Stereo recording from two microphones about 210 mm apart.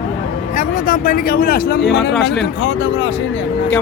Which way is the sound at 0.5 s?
40° left (ahead or behind).